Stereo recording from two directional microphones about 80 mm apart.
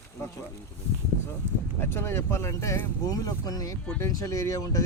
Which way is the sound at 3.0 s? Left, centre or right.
Left.